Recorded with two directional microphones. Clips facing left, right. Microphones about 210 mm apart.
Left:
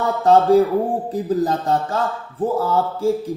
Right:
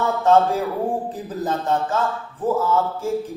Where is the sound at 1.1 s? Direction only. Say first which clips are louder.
Left 6 dB; 35° left (ahead or behind).